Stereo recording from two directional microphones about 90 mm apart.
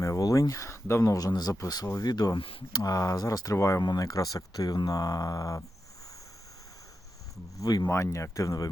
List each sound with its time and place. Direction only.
0.0 s speech: 40° left (ahead or behind)
2.4 s speech: 90° left
2.7 s speech: 40° left (ahead or behind)
7.6 s speech: 45° left (ahead or behind)
7.9 s speech: 30° left (ahead or behind)